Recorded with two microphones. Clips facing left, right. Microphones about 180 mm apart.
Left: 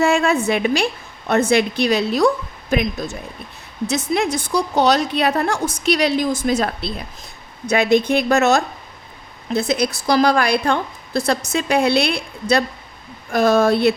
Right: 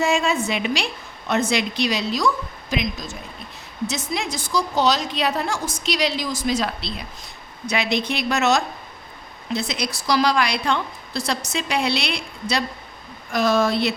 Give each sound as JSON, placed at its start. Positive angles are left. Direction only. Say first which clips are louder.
{"t": 0.0, "sound": "a woman's voice", "louder": "left 4 dB", "side_deg": 60}